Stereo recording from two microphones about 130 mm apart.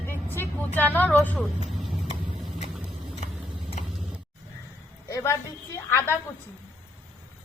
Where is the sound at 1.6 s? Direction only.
Centre (ahead or behind).